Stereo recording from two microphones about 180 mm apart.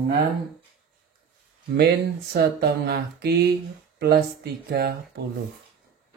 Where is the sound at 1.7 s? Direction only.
65° right (ahead or behind).